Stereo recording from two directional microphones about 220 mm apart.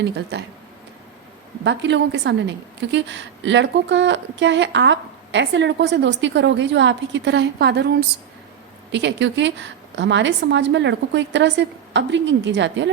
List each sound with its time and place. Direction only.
0.0 s a woman's voice: 50° right (ahead or behind)
1.6 s a woman's voice: 50° right (ahead or behind)
8.9 s a woman's voice: 50° right (ahead or behind)